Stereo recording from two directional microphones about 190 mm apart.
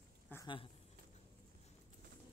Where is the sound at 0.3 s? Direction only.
10° left (ahead or behind).